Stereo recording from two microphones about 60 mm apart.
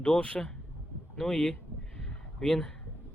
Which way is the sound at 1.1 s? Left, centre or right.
Centre.